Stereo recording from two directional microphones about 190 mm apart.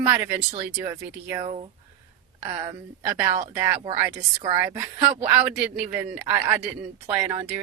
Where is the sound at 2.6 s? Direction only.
15° right (ahead or behind).